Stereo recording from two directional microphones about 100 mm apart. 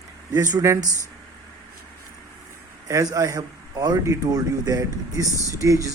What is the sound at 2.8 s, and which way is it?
A man's voice, 35° right (ahead or behind).